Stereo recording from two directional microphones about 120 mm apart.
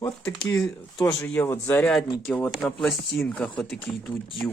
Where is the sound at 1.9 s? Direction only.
5° left (ahead or behind).